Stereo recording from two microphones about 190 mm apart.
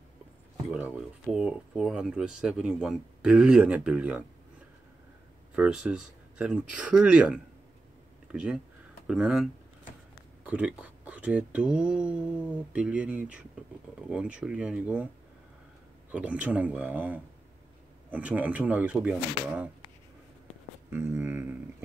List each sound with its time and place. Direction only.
0.7 s speech: 5° right (ahead or behind)
5.6 s speech: 5° right (ahead or behind)
16.1 s speech: 5° right (ahead or behind)
20.9 s speech: 15° right (ahead or behind)